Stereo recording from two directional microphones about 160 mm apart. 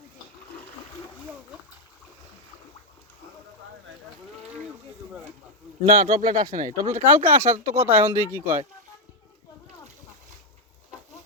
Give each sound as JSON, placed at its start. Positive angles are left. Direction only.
{"t": 5.8, "sound": "speech", "side_deg": -55}
{"t": 6.8, "sound": "speech", "side_deg": -40}
{"t": 7.9, "sound": "speech", "side_deg": -15}